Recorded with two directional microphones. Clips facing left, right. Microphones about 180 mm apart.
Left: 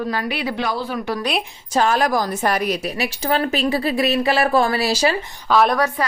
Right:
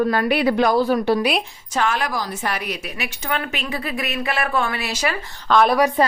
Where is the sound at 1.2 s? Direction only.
Centre (ahead or behind).